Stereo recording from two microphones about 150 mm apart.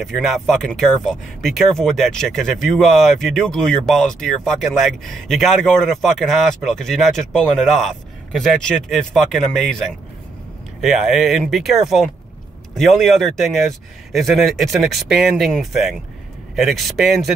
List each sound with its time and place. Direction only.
0.0 s speech: centre (ahead or behind)